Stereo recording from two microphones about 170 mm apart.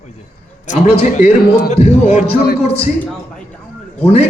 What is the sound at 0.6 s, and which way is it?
A man's voice, 40° left (ahead or behind).